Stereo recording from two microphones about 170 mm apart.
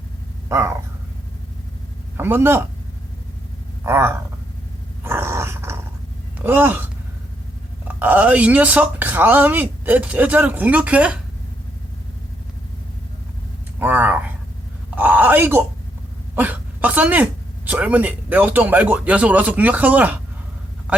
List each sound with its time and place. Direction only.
0.4 s a sound: 15° right (ahead or behind)
2.1 s a man's voice: 15° right (ahead or behind)
3.8 s speech: 15° right (ahead or behind)
5.0 s a sound: 15° right (ahead or behind)
6.4 s speech: 10° right (ahead or behind)
7.9 s speech: 10° right (ahead or behind)
13.7 s a man's voice: 10° right (ahead or behind)
16.3 s a sound: 10° right (ahead or behind)
17.7 s speech: 10° right (ahead or behind)